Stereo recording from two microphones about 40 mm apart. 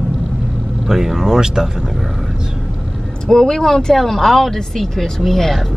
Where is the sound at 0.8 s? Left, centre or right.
Centre.